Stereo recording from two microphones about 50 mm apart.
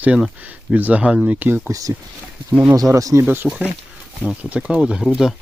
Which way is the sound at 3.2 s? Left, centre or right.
Right.